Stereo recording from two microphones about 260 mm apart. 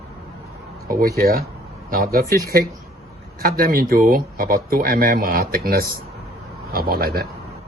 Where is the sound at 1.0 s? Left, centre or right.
Right.